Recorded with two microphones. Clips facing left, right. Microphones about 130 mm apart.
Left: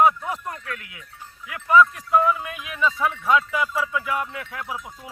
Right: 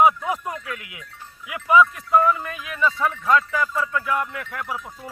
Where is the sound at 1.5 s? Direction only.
10° right (ahead or behind).